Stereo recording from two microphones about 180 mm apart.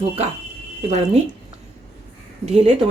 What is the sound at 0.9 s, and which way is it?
Speech, 35° right (ahead or behind).